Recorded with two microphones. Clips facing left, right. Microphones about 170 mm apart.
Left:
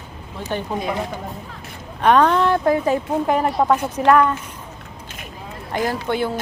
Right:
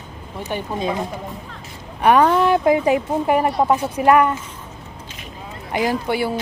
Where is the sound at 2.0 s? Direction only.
10° right (ahead or behind).